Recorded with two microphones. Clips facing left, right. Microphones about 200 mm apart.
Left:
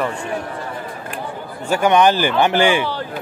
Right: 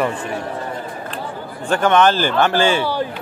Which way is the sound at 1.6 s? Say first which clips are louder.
Even; 10° left (ahead or behind).